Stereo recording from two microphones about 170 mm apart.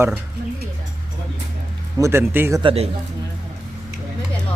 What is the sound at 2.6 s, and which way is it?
Speech, 35° right (ahead or behind).